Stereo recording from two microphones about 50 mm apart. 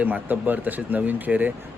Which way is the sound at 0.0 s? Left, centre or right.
Right.